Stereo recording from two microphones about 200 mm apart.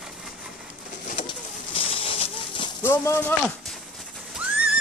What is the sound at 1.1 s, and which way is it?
Pigeon, 25° left (ahead or behind).